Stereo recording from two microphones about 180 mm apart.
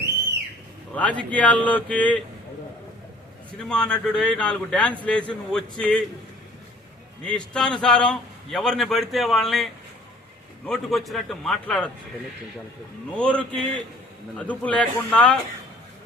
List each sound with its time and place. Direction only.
0.9 s speech: 10° left (ahead or behind)
3.6 s a man's voice: 5° left (ahead or behind)
7.3 s a man's voice: 5° left (ahead or behind)
10.7 s a man's voice: centre (ahead or behind)
13.1 s speech: 5° left (ahead or behind)